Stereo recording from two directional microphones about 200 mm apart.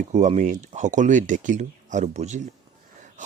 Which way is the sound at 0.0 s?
35° right (ahead or behind).